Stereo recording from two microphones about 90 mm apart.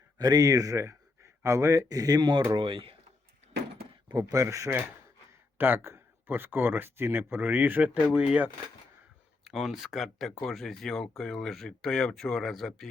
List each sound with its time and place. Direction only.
0.2 s speech: 45° right (ahead or behind)
2.6 s speech: 75° right (ahead or behind)
4.1 s speech: 40° right (ahead or behind)
5.5 s speech: 20° right (ahead or behind); by 12.9 s centre (ahead or behind)